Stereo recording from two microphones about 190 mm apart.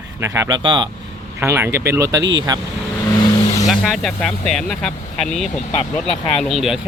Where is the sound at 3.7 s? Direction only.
Centre (ahead or behind).